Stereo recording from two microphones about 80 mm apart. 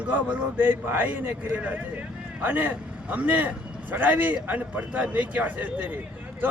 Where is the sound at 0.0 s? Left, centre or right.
Centre.